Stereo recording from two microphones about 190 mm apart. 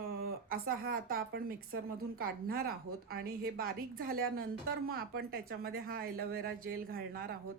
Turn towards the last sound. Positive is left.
turn(degrees=-50)  # may be behind; listen again after turning